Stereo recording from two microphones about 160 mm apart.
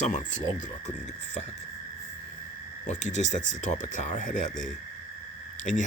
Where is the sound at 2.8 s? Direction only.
50° left (ahead or behind).